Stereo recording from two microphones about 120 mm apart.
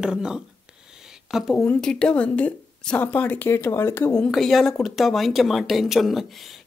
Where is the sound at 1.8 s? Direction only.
10° left (ahead or behind).